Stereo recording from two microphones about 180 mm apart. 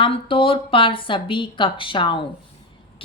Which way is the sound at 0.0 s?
30° left (ahead or behind).